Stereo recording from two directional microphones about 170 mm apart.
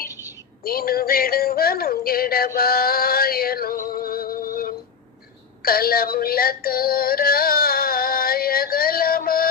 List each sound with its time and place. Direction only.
0.6 s music: 60° left (ahead or behind)
5.6 s synthetic singing: 60° left (ahead or behind)